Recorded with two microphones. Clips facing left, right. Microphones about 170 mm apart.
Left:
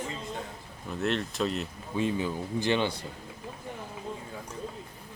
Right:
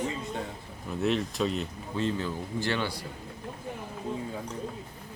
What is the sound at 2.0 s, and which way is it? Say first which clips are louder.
Speech: left 1 dB; 15° left (ahead or behind).